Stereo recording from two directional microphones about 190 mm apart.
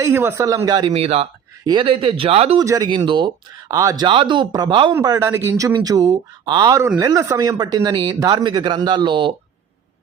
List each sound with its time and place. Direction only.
0.0 s speech: 15° right (ahead or behind); by 2.6 s 30° right (ahead or behind)
2.6 s speech: 20° right (ahead or behind)